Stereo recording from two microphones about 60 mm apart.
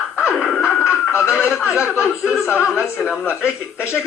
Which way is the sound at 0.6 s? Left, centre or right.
Left.